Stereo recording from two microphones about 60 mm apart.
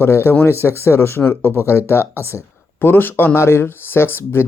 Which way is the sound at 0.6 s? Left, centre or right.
Left.